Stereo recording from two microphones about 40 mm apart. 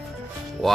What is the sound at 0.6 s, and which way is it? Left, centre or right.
Speech, centre.